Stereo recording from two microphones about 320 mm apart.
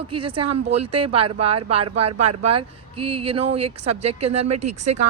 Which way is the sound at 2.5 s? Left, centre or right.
Centre.